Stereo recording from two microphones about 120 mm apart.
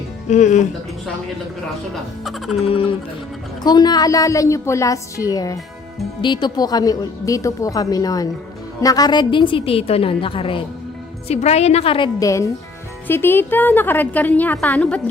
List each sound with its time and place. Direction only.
0.3 s speech: 85° left
2.2 s music: centre (ahead or behind)
3.6 s a woman's voice: 35° left (ahead or behind)
11.3 s a woman's voice: 65° left (ahead or behind); by 12.1 s 45° left (ahead or behind)
12.2 s a woman's voice: 25° left (ahead or behind); by 15.0 s 10° left (ahead or behind)